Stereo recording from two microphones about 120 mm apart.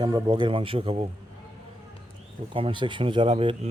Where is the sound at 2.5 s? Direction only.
45° right (ahead or behind).